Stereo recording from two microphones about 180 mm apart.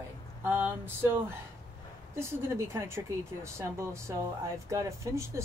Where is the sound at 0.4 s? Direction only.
10° right (ahead or behind).